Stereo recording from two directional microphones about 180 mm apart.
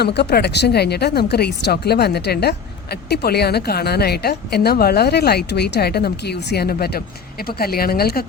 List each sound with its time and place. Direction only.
0.0 s speech: 65° left (ahead or behind)